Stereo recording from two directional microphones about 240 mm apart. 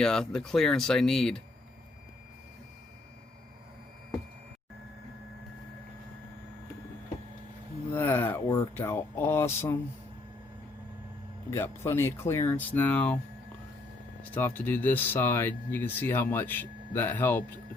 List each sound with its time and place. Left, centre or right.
0.0 s speech: centre
7.9 s speech: centre
11.5 s speech: centre
14.2 s speech: centre